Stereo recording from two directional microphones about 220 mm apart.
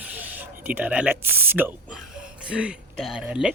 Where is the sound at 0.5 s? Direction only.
10° right (ahead or behind).